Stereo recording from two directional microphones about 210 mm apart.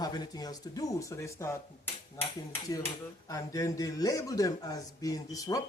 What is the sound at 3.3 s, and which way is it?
A man's voice, 15° left (ahead or behind).